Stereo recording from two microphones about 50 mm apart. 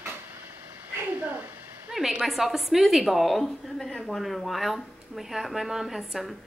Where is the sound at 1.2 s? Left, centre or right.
Right.